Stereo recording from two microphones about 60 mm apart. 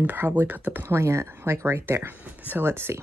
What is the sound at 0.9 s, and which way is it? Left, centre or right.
Speech, right.